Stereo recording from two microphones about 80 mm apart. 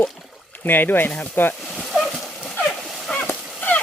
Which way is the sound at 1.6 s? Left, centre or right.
Centre.